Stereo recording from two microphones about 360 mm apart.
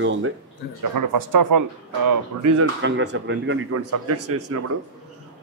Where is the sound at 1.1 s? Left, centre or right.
Right.